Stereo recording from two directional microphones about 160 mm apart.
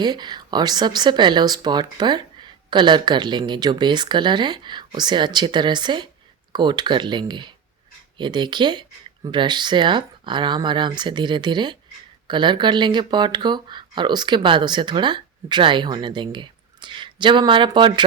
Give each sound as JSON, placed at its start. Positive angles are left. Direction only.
{"t": 0.0, "sound": "speech", "side_deg": -25}